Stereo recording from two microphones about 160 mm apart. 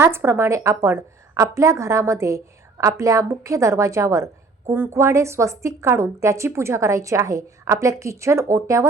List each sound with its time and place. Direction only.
0.0 s a woman's voice: 15° right (ahead or behind)